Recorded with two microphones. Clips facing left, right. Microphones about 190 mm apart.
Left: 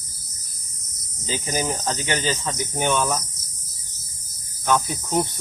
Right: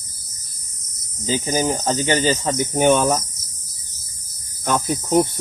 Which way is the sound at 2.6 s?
50° right (ahead or behind).